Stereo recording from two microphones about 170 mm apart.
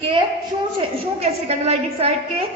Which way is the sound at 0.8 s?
35° right (ahead or behind).